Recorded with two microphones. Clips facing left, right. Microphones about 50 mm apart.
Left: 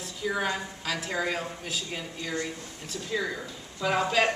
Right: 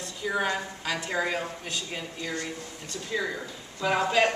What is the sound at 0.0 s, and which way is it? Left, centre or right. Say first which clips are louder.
A woman's voice: right 1 dB; centre.